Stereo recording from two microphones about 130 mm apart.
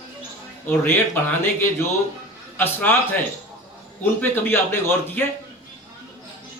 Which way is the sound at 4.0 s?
15° left (ahead or behind).